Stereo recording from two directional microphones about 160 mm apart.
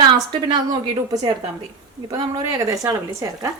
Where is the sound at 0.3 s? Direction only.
25° right (ahead or behind).